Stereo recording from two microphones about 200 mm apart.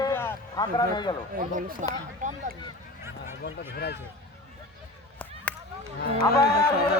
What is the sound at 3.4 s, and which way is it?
Speech, 55° left (ahead or behind).